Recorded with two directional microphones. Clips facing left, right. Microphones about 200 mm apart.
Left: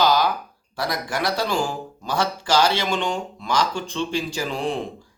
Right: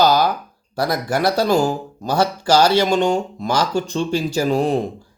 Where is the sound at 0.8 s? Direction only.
40° right (ahead or behind).